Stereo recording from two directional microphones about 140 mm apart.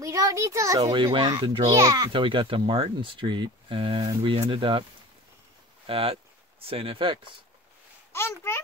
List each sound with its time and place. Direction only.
0.0 s a child's voice: 25° right (ahead or behind)
2.1 s speech: 40° right (ahead or behind)
5.9 s speech: 40° right (ahead or behind)
8.1 s a child's voice: 20° left (ahead or behind)